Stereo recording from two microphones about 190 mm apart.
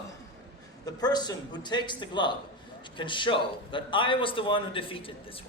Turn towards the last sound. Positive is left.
turn(degrees=30)  # may be behind; listen again after turning